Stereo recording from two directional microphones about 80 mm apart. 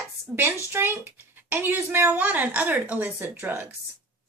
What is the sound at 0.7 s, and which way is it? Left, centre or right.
A woman's voice, right.